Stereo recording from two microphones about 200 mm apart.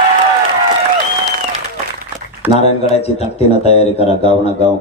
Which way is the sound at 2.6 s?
30° left (ahead or behind).